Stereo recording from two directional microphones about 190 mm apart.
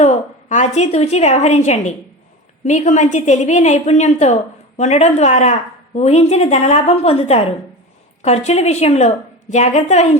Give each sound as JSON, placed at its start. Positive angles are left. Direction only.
{"t": 0.0, "sound": "a woman's voice", "side_deg": 40}